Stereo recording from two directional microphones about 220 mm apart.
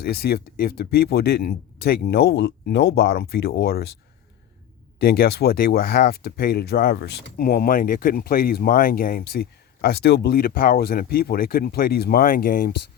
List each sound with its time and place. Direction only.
0.0 s speech: 45° left (ahead or behind)
4.9 s speech: 45° left (ahead or behind)